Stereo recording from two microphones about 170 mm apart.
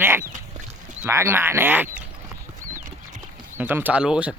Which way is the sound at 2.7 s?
45° right (ahead or behind).